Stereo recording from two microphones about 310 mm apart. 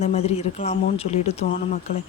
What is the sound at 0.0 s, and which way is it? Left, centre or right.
Speech, centre.